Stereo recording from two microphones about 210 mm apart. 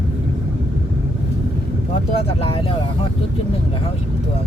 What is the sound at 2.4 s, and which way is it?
Vehicle, 25° left (ahead or behind).